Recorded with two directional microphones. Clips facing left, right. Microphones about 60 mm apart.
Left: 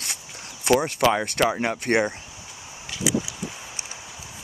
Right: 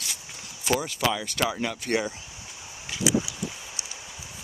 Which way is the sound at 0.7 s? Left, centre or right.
Left.